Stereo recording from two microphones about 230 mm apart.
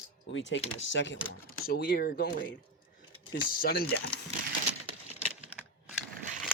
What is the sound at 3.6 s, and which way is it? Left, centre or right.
Speech, left.